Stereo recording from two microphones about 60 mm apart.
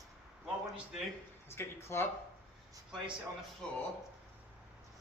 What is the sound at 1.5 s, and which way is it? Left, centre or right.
Speech, left.